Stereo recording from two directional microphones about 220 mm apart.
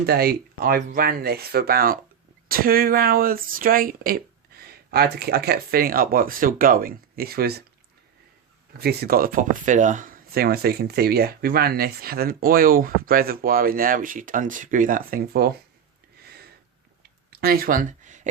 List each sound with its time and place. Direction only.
0.0 s speech: 45° right (ahead or behind)
8.8 s speech: 45° right (ahead or behind)
16.2 s a sound: 45° right (ahead or behind)